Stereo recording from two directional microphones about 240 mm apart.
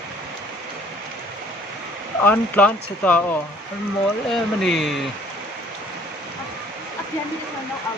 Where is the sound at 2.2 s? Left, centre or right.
Centre.